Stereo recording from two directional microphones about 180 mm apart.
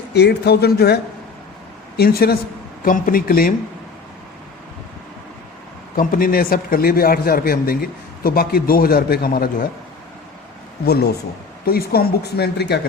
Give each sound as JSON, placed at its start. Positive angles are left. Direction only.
{"t": 0.1, "sound": "a man's voice", "side_deg": 65}
{"t": 2.0, "sound": "a man's voice", "side_deg": 60}
{"t": 6.0, "sound": "a man's voice", "side_deg": 50}
{"t": 10.8, "sound": "a man's voice", "side_deg": 60}